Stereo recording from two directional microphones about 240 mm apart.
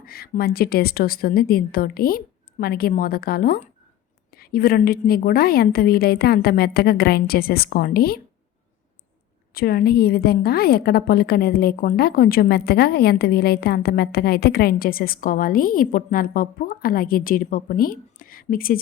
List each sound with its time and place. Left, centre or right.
0.0 s a woman's voice: left
9.6 s a woman's voice: left